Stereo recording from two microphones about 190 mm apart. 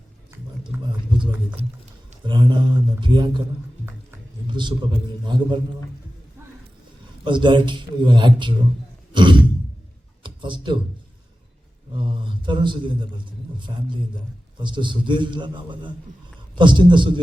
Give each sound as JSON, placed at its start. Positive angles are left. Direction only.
{"t": 0.7, "sound": "a sound", "side_deg": -10}
{"t": 2.2, "sound": "a man's voice", "side_deg": -25}
{"t": 4.4, "sound": "a man's voice", "side_deg": -25}
{"t": 7.3, "sound": "a man's voice", "side_deg": -25}
{"t": 11.9, "sound": "a man's voice", "side_deg": -25}